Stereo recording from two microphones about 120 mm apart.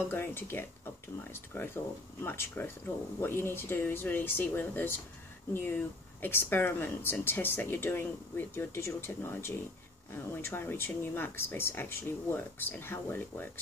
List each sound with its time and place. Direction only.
0.1 s speech: 20° left (ahead or behind)